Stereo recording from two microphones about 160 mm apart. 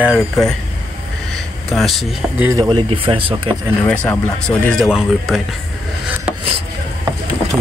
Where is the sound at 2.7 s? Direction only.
30° right (ahead or behind).